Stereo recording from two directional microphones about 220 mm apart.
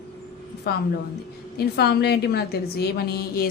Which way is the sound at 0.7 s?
45° left (ahead or behind).